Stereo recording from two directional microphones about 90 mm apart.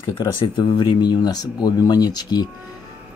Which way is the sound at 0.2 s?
55° left (ahead or behind).